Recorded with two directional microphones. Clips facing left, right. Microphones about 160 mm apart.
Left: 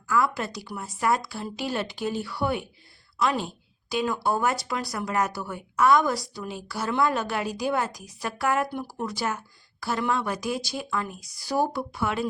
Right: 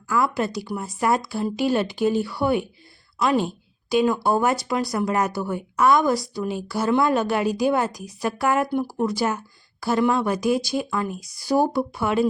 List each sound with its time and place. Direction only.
0.1 s a woman's voice: 20° right (ahead or behind)